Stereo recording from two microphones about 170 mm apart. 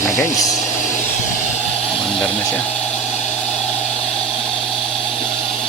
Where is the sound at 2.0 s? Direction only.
Centre (ahead or behind).